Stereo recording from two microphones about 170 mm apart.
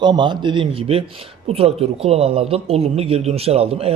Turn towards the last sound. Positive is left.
turn(degrees=-35)  # may be behind; listen again after turning